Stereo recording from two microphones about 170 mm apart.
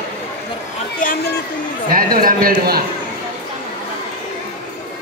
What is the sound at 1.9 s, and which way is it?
Speech, 60° right (ahead or behind).